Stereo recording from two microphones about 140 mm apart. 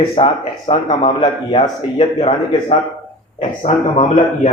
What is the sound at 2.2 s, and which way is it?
A man's voice, 55° left (ahead or behind).